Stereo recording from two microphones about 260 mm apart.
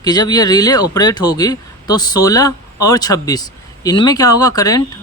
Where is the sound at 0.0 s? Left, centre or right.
Centre.